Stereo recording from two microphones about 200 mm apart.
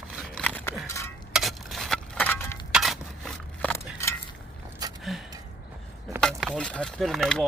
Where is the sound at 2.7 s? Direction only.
Centre (ahead or behind).